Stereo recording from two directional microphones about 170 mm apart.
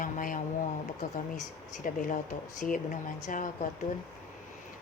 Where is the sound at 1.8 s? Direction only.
50° left (ahead or behind).